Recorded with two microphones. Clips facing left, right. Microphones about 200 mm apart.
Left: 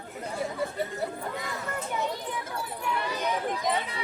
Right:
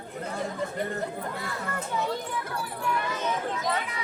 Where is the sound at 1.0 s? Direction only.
15° left (ahead or behind).